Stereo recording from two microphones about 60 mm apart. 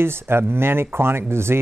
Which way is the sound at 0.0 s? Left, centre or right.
Right.